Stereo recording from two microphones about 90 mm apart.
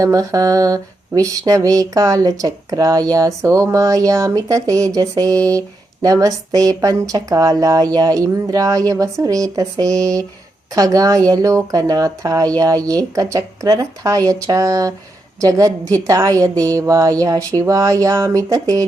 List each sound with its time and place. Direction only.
0.0 s speech: 40° right (ahead or behind)